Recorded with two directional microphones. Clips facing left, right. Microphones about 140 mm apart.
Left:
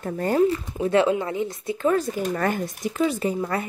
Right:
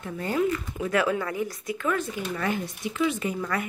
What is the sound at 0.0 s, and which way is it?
Speech, 40° left (ahead or behind).